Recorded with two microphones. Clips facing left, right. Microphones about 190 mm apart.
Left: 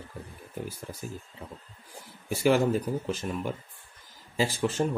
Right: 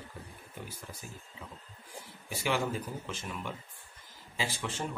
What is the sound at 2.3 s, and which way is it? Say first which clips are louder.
A man's voice: left 9 dB; 45° left (ahead or behind).